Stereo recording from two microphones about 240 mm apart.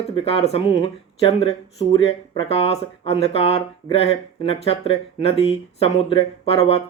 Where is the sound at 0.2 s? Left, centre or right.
Left.